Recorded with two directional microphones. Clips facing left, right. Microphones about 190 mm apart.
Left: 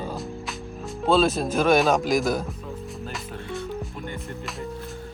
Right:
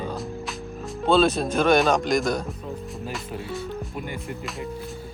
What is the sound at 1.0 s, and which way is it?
Speech, centre (ahead or behind).